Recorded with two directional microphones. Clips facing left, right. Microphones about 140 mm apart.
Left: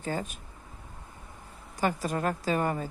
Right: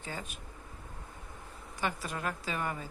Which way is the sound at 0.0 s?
45° left (ahead or behind).